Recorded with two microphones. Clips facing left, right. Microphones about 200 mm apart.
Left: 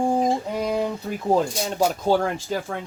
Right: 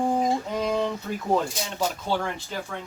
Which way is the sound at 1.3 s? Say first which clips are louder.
Left 4 dB; 40° left (ahead or behind).